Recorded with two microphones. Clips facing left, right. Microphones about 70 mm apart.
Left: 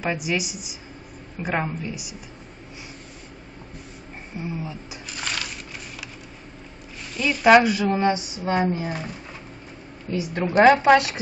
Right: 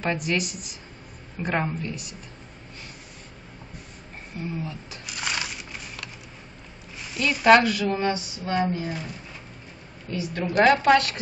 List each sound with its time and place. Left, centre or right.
0.0 s a woman's voice: centre
4.4 s a woman's voice: centre
5.0 s a sound: centre
7.2 s a woman's voice: centre; by 8.9 s left
10.1 s a woman's voice: left